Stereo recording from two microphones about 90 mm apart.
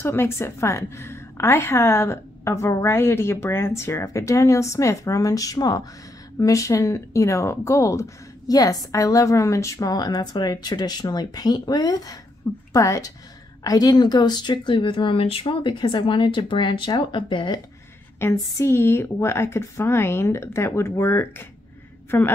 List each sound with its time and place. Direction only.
0.0 s a woman's voice: 25° left (ahead or behind); by 5.9 s 50° left (ahead or behind)
6.3 s a woman's voice: 35° left (ahead or behind)
9.8 s a woman's voice: 50° left (ahead or behind); by 17.6 s 65° left (ahead or behind)
18.2 s a woman's voice: 30° left (ahead or behind)